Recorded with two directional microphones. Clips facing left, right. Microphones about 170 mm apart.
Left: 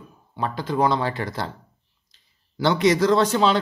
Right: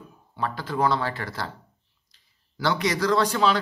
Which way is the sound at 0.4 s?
20° left (ahead or behind).